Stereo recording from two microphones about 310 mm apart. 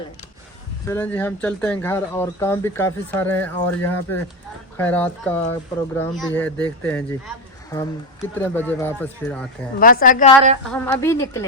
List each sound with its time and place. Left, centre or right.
0.9 s speech: centre
9.8 s a woman's voice: left
10.7 s speech: centre